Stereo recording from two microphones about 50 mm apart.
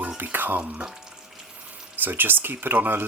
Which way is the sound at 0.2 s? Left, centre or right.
Right.